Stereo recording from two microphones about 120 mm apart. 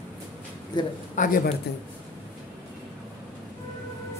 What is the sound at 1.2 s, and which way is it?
Speech, 90° left.